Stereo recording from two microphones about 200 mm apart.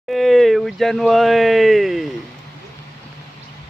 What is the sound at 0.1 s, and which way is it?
Speech, centre (ahead or behind).